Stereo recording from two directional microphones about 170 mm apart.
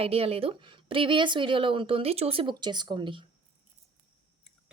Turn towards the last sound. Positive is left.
turn(degrees=-25)  # may be behind; listen again after turning